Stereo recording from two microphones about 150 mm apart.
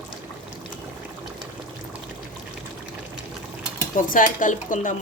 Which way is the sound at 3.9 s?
60° left (ahead or behind).